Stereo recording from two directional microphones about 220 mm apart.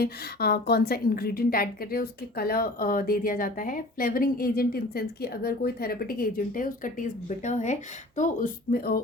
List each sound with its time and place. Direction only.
0.0 s a woman's voice: 45° left (ahead or behind)